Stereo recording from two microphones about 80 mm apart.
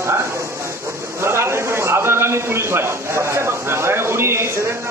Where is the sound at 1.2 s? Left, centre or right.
Right.